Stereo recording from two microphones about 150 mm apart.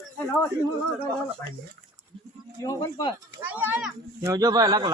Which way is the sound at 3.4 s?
15° right (ahead or behind).